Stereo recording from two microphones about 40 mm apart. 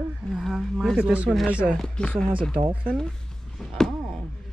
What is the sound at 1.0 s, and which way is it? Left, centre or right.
Speech, right.